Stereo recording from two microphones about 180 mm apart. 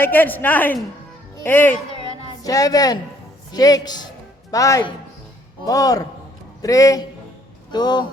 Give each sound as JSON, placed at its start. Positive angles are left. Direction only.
{"t": 0.0, "sound": "a man's voice", "side_deg": 10}